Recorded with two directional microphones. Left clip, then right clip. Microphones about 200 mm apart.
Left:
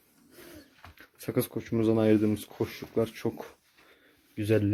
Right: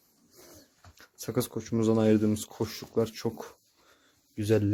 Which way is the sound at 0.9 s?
5° right (ahead or behind).